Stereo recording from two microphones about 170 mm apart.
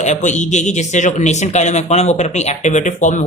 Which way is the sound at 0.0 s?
45° left (ahead or behind).